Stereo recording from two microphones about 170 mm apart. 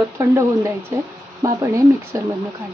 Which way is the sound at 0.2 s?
15° right (ahead or behind).